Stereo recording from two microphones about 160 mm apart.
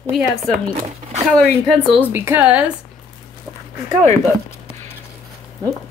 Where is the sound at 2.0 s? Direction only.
15° right (ahead or behind).